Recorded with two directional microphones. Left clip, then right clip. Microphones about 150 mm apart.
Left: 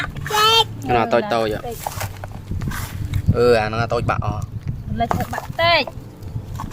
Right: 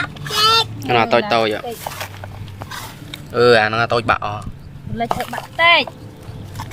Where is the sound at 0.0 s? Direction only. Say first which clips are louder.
Right 1 dB; 5° left (ahead or behind).